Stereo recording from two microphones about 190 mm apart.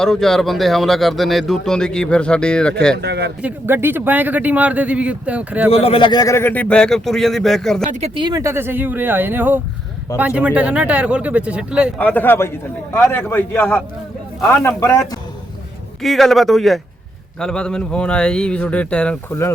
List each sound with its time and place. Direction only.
0.0 s speech: centre (ahead or behind)
3.0 s speech: 60° right (ahead or behind)
3.4 s speech: 10° right (ahead or behind)
5.7 s speech: 30° left (ahead or behind); by 7.9 s centre (ahead or behind)
7.9 s speech: 30° right (ahead or behind); by 11.9 s 5° right (ahead or behind)
11.9 s a man's voice: 10° left (ahead or behind)
16.0 s speech: centre (ahead or behind)